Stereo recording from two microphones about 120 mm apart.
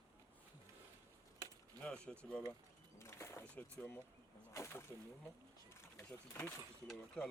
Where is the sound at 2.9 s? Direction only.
25° left (ahead or behind).